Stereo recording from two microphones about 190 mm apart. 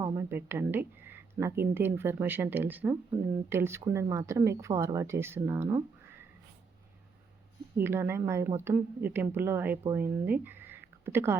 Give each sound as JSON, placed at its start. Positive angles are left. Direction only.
{"t": 0.0, "sound": "a woman's voice", "side_deg": -15}
{"t": 7.8, "sound": "a woman's voice", "side_deg": -10}